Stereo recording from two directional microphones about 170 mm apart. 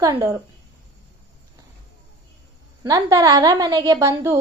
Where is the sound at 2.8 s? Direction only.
20° right (ahead or behind).